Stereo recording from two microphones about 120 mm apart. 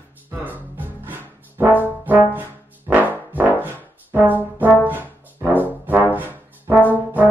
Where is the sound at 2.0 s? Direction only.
15° right (ahead or behind).